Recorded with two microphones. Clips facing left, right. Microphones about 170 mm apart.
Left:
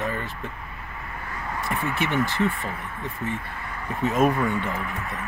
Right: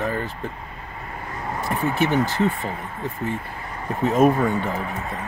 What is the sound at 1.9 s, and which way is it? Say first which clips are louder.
Speech: right 7 dB; 40° right (ahead or behind).